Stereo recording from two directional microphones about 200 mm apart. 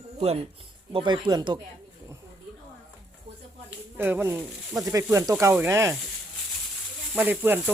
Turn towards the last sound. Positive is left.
turn(degrees=-10)  # may be behind; listen again after turning